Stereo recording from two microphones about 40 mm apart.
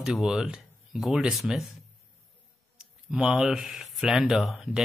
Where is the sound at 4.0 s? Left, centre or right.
Centre.